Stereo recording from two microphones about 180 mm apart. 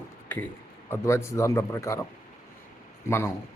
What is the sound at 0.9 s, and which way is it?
Speech, 15° left (ahead or behind).